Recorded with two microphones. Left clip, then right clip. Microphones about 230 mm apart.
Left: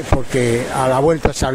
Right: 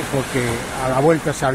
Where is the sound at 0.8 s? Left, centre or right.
Left.